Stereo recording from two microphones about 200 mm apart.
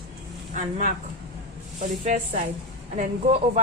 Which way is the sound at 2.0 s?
35° right (ahead or behind).